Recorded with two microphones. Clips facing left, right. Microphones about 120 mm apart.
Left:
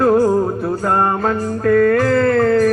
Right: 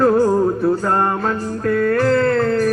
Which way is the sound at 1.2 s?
45° left (ahead or behind).